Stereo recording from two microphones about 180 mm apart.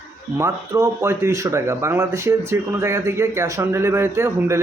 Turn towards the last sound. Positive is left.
turn(degrees=-15)  # may be behind; listen again after turning